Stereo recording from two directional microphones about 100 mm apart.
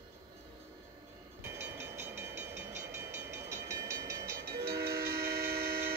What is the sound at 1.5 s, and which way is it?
Train, 25° right (ahead or behind).